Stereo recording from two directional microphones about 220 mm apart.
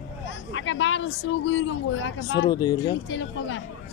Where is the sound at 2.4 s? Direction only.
20° left (ahead or behind).